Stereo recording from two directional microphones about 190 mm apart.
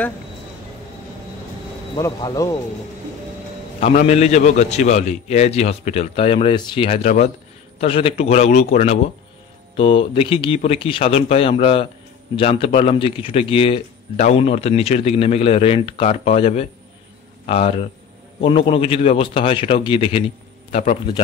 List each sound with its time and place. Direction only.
2.0 s speech: 20° left (ahead or behind)
3.8 s a man's voice: 35° left (ahead or behind)
20.7 s a man's voice: 40° left (ahead or behind)